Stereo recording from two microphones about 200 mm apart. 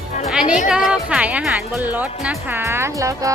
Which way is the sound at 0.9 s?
5° right (ahead or behind).